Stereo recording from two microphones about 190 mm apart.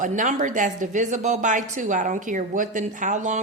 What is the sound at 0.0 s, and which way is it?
A woman's voice, 40° right (ahead or behind).